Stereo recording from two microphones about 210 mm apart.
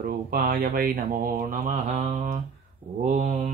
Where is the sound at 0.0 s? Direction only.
40° right (ahead or behind).